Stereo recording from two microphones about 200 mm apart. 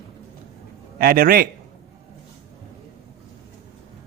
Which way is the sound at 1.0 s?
45° right (ahead or behind).